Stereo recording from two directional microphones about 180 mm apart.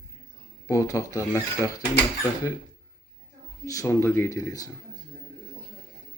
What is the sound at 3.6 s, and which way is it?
Speech, 15° left (ahead or behind).